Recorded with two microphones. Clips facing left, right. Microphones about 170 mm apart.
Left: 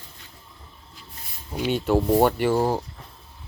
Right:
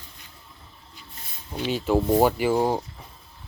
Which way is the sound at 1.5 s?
5° left (ahead or behind).